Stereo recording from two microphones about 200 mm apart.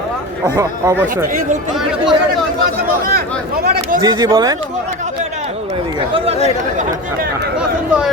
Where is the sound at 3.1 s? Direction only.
50° right (ahead or behind).